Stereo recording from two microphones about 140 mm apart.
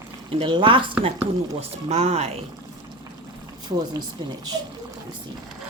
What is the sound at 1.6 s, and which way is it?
Speech, 50° right (ahead or behind).